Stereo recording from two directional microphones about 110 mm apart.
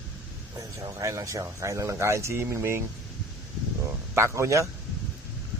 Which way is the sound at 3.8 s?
25° right (ahead or behind).